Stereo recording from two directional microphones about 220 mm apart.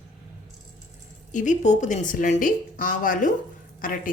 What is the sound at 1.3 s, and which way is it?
A woman's voice, 35° left (ahead or behind).